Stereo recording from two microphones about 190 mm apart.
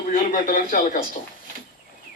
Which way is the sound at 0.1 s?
45° left (ahead or behind).